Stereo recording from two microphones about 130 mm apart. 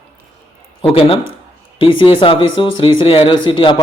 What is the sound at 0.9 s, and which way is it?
A man's voice, 45° left (ahead or behind).